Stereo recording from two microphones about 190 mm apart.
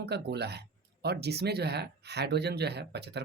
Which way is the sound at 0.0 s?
60° right (ahead or behind).